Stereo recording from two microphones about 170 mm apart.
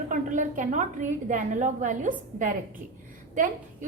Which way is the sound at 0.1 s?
50° right (ahead or behind).